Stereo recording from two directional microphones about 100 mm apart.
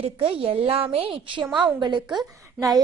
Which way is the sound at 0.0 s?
70° right (ahead or behind).